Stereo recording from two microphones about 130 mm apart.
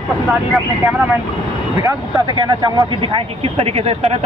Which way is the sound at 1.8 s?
35° right (ahead or behind).